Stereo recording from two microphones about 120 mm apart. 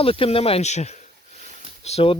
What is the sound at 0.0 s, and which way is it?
Speech, 50° left (ahead or behind).